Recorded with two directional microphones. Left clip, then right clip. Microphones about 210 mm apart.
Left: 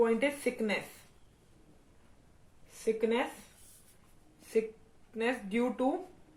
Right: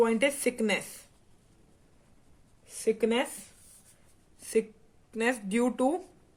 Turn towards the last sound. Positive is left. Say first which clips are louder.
# right 4 dB
turn(degrees=-50)  # may be behind; listen again after turning